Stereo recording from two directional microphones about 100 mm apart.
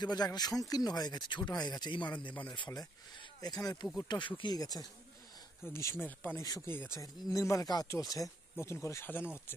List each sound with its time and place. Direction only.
0.0 s speech: 45° left (ahead or behind)
3.3 s speech: 40° left (ahead or behind)
4.1 s speech: 55° left (ahead or behind)
4.6 s speech: 40° left (ahead or behind)
5.6 s speech: 25° left (ahead or behind)
7.3 s speech: 35° left (ahead or behind)